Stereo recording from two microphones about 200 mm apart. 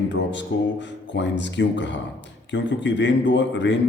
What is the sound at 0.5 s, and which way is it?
A man's voice, 60° left (ahead or behind).